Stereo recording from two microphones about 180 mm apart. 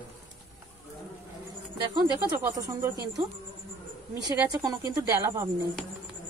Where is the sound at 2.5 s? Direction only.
20° right (ahead or behind).